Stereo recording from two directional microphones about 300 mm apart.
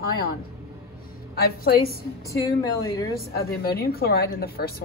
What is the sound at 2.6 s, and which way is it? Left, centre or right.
Speech, centre.